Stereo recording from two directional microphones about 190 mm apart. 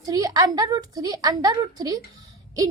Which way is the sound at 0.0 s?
20° right (ahead or behind).